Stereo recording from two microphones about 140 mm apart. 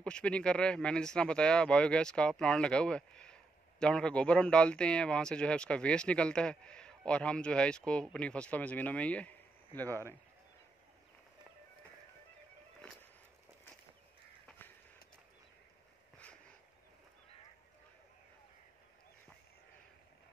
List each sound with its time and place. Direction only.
0.0 s speech: 10° left (ahead or behind)